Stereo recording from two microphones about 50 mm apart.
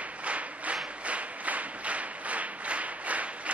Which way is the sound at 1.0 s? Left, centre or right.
Right.